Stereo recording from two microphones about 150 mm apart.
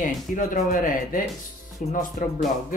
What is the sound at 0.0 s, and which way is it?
Speech, 60° left (ahead or behind).